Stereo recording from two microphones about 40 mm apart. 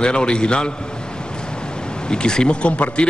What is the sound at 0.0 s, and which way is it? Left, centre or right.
Speech, left.